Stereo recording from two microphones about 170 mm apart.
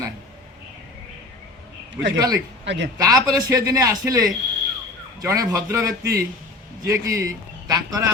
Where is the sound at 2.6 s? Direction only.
90° right.